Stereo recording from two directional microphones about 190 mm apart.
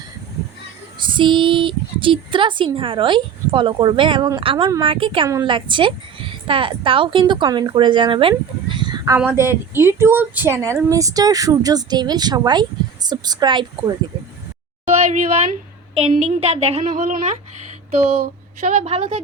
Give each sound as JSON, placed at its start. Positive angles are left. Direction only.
{"t": 1.0, "sound": "speech", "side_deg": -25}
{"t": 9.1, "sound": "speech", "side_deg": -10}
{"t": 14.8, "sound": "a woman's voice", "side_deg": -40}
{"t": 18.9, "sound": "speech", "side_deg": -25}